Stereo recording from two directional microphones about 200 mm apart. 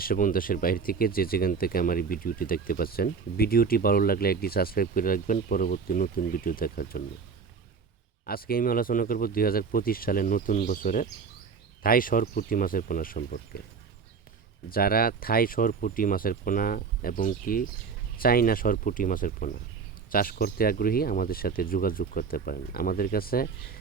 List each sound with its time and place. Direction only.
0.0 s speech: 45° left (ahead or behind)
8.3 s speech: 50° left (ahead or behind)
14.7 s speech: 50° left (ahead or behind)